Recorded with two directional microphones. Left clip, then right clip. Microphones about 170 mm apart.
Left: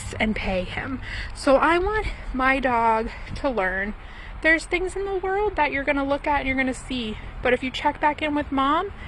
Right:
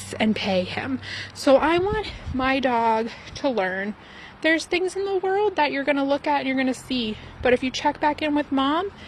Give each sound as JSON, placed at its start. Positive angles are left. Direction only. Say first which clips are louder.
{"t": 0.1, "sound": "a woman's voice", "louder": "right 2 dB", "side_deg": -45}
{"t": 6.9, "sound": "a woman's voice", "louder": "right 3 dB", "side_deg": 0}
{"t": 7.4, "sound": "speech", "louder": "right 1 dB", "side_deg": -40}